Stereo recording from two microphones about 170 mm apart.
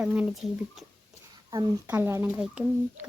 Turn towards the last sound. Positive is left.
turn(degrees=-5)  # may be behind; listen again after turning